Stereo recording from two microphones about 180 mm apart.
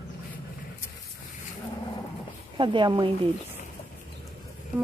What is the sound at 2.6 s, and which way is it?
Speech, 25° right (ahead or behind).